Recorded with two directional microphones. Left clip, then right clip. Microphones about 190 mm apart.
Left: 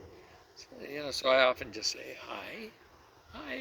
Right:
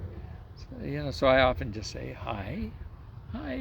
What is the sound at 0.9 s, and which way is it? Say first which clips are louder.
A man's voice: right 4 dB; 20° right (ahead or behind).